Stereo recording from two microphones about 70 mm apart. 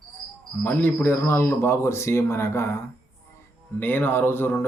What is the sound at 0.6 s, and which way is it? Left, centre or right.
Speech, left.